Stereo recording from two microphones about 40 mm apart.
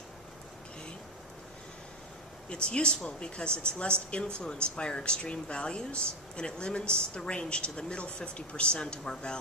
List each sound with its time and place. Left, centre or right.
2.5 s speech: left